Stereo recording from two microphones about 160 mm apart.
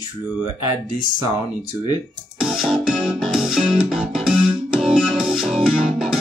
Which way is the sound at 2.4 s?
5° right (ahead or behind).